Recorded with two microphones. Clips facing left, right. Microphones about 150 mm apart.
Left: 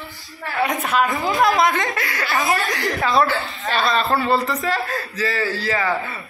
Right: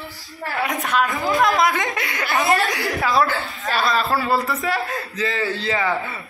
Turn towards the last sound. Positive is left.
turn(degrees=-20)  # may be behind; listen again after turning